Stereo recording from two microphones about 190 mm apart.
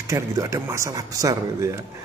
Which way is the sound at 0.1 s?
15° right (ahead or behind).